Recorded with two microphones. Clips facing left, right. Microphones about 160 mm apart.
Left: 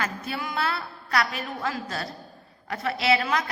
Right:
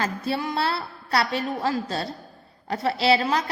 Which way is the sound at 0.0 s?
30° right (ahead or behind).